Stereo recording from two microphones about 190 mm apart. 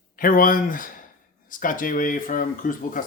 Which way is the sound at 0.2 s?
45° left (ahead or behind).